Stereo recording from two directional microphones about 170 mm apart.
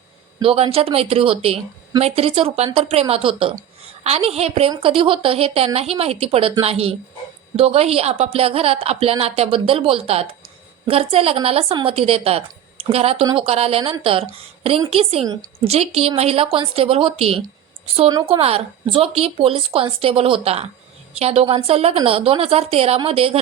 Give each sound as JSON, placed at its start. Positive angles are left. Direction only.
{"t": 0.3, "sound": "a woman's voice", "side_deg": -35}